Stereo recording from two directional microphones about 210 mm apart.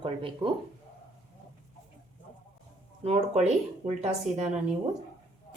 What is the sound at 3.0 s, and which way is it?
A woman's voice, 30° right (ahead or behind).